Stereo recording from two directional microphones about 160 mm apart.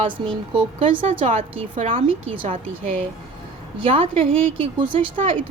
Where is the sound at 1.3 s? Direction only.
35° right (ahead or behind).